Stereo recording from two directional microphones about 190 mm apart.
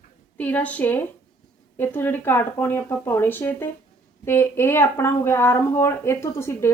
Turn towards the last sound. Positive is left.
turn(degrees=15)  # may be behind; listen again after turning